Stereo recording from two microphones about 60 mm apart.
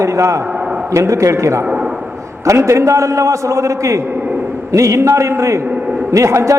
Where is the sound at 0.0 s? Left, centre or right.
Right.